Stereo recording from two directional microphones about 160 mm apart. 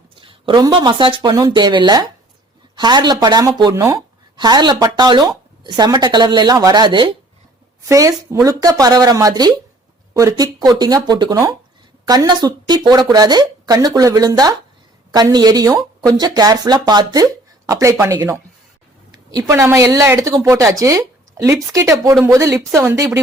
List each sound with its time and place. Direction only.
0.2 s speech: 30° right (ahead or behind)
7.8 s speech: 20° right (ahead or behind)